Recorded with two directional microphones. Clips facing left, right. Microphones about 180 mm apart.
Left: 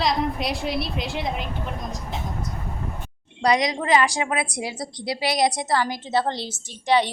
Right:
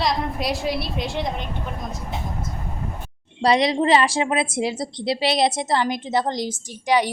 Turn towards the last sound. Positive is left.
turn(degrees=-10)  # may be behind; listen again after turning